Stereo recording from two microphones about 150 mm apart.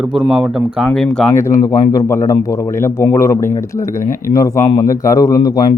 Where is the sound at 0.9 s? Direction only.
5° left (ahead or behind).